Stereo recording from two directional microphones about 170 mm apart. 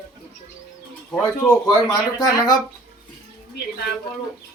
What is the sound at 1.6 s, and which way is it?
Speech, 20° left (ahead or behind).